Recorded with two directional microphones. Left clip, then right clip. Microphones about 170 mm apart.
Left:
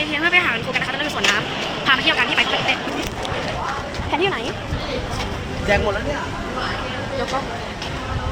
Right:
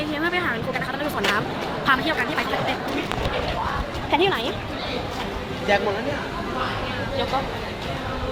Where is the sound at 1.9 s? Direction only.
35° right (ahead or behind).